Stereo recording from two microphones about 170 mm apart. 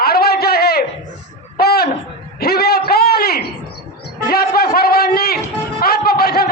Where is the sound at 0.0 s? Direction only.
65° left (ahead or behind).